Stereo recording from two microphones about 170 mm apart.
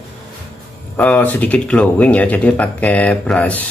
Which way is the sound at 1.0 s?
10° left (ahead or behind).